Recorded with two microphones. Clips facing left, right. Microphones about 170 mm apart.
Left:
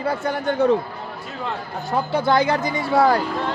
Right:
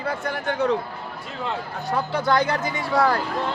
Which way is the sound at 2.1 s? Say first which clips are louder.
Left 4 dB; 30° left (ahead or behind).